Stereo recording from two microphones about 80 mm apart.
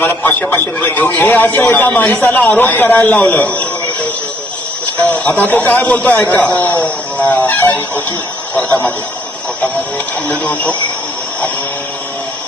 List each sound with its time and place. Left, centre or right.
0.0 s a man's voice: left
4.9 s a man's voice: centre
6.2 s a sound: centre
8.5 s a man's voice: left
10.2 s a man's voice: left